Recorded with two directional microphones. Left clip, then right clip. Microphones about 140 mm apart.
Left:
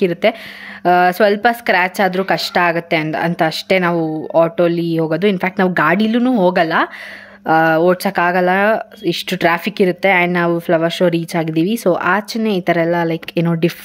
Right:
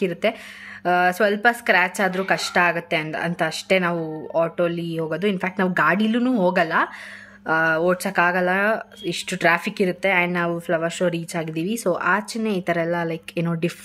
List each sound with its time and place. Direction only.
0.0 s speech: 30° left (ahead or behind)